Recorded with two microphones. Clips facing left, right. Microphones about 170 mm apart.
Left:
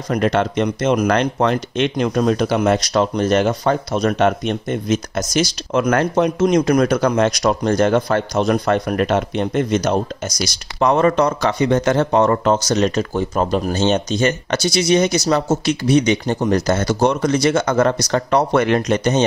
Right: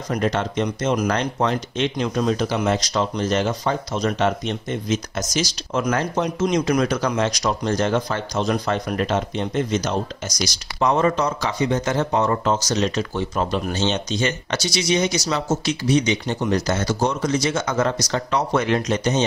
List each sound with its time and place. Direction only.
0.1 s speech: 65° left (ahead or behind)